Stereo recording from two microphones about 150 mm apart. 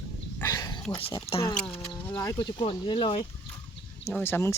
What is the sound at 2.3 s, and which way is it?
Speech, 35° left (ahead or behind).